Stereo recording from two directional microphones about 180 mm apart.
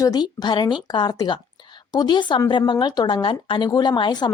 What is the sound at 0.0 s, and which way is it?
Speech, 20° left (ahead or behind).